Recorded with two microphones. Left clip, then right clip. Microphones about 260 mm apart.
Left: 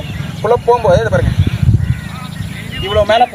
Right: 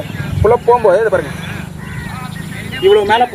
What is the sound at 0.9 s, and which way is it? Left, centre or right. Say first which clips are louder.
Speech: right 1 dB; left.